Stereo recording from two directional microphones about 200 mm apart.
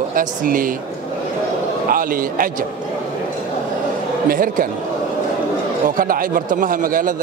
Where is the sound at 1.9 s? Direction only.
45° right (ahead or behind).